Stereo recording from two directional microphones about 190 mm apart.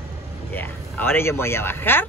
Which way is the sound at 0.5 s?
10° left (ahead or behind).